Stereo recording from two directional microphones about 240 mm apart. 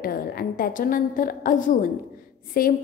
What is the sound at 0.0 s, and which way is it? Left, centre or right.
A woman's voice, left.